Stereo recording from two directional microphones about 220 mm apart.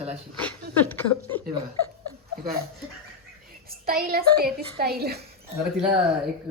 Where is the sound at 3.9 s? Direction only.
45° right (ahead or behind).